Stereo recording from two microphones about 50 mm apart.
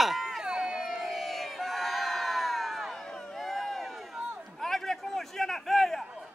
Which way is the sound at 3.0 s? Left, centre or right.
Centre.